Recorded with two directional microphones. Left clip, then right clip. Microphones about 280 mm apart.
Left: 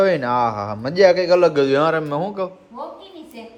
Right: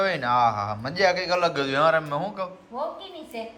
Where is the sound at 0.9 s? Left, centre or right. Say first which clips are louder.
Left 9 dB; centre.